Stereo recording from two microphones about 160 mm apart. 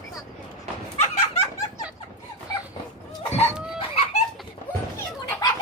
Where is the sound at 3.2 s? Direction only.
40° left (ahead or behind).